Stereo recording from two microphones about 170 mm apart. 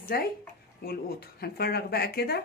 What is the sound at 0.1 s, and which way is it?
Speech, 65° left (ahead or behind).